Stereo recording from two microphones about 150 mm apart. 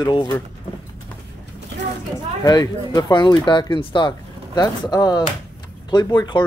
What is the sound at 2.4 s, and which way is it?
Speech, 25° left (ahead or behind).